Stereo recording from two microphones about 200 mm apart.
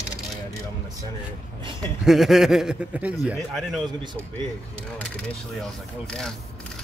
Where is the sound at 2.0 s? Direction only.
Centre (ahead or behind).